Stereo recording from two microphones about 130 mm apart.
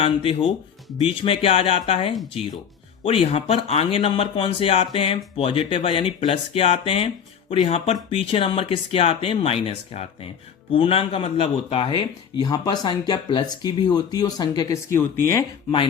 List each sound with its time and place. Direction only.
0.0 s speech: 45° left (ahead or behind); by 15.4 s 20° left (ahead or behind)